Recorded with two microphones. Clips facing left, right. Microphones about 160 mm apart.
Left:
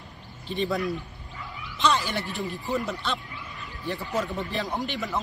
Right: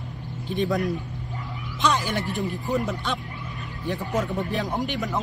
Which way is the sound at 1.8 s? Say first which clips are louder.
Right 1 dB; 10° right (ahead or behind).